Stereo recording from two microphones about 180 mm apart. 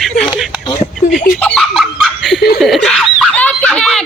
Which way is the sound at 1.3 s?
5° left (ahead or behind).